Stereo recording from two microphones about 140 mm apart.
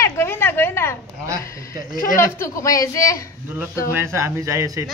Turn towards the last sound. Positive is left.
turn(degrees=-25)  # may be behind; listen again after turning